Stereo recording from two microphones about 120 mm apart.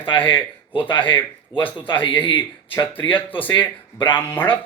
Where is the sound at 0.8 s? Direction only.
45° left (ahead or behind).